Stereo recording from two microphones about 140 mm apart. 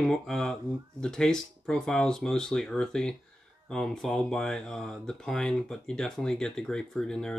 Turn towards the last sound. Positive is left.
turn(degrees=5)  # may be behind; listen again after turning